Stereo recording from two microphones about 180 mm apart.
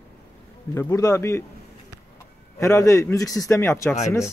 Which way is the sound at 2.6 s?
15° left (ahead or behind).